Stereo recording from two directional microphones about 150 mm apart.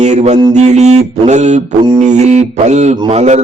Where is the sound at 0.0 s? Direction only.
50° right (ahead or behind).